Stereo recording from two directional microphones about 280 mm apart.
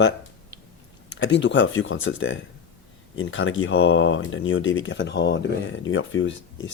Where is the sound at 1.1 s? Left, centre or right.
Left.